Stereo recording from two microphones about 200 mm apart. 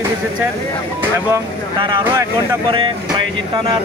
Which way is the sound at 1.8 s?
20° right (ahead or behind).